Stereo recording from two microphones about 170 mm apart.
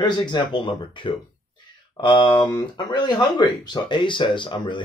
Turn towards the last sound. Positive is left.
turn(degrees=30)  # may be behind; listen again after turning